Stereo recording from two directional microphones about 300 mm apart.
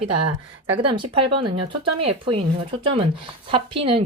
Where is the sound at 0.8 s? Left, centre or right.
Centre.